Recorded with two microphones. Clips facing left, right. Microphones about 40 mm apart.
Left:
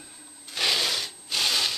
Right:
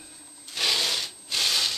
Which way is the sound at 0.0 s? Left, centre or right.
Centre.